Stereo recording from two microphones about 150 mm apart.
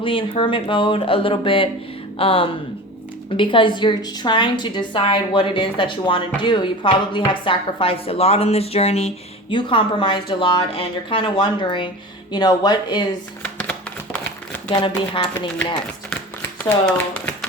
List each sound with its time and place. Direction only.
0.0 s a woman's voice: 35° left (ahead or behind)
9.6 s a woman's voice: 35° left (ahead or behind)
13.4 s a sound: 10° left (ahead or behind)
14.7 s a woman's voice: 30° left (ahead or behind)
16.6 s speech: 10° left (ahead or behind)